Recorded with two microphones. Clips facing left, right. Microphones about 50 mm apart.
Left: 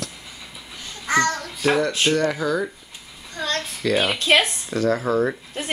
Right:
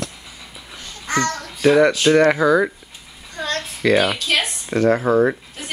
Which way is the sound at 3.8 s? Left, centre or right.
Right.